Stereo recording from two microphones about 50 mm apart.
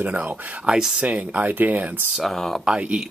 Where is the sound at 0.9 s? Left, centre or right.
Right.